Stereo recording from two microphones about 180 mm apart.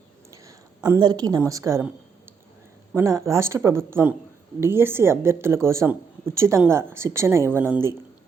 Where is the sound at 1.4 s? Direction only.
15° right (ahead or behind).